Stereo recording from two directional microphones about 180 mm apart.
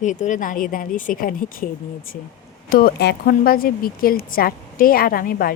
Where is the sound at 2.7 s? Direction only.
60° left (ahead or behind).